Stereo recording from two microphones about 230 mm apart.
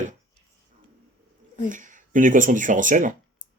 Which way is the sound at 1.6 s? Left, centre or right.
Right.